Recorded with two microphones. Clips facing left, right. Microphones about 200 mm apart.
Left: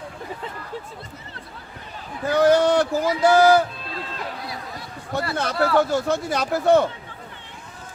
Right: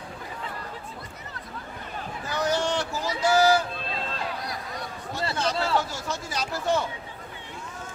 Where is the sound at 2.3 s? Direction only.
60° left (ahead or behind).